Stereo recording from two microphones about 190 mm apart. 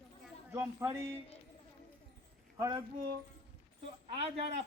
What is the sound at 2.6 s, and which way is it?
Speech, 20° right (ahead or behind).